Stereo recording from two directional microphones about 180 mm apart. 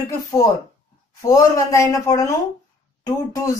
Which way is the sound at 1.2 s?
20° left (ahead or behind).